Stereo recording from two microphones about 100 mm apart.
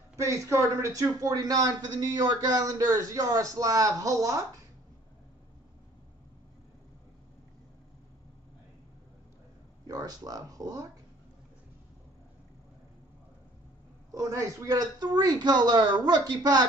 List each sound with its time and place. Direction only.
0.1 s a man's voice: 30° right (ahead or behind)
9.8 s speech: 40° right (ahead or behind)
14.1 s a man's voice: 35° right (ahead or behind)